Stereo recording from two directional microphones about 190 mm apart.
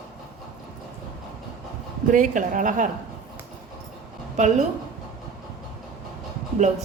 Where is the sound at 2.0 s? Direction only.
40° right (ahead or behind).